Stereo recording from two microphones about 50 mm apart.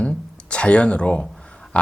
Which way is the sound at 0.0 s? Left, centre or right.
Left.